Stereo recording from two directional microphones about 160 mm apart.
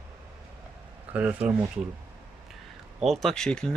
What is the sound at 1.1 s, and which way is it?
Speech, 10° right (ahead or behind).